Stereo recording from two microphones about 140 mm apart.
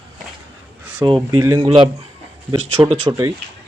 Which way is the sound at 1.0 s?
25° right (ahead or behind).